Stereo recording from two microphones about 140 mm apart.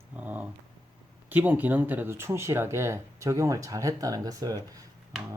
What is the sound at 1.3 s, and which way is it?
Speech, 10° right (ahead or behind).